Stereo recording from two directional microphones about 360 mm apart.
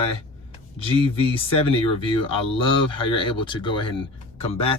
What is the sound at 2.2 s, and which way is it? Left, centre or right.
Speech, centre.